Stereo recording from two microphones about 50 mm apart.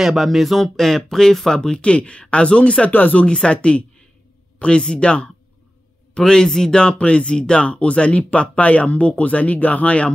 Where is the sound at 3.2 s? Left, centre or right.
Centre.